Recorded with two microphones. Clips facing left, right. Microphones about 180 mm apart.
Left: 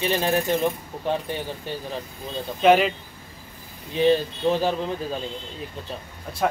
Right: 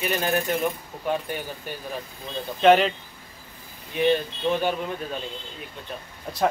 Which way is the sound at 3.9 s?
30° left (ahead or behind).